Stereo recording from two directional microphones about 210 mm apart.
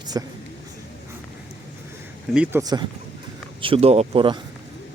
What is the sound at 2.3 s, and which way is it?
Speech, 10° right (ahead or behind).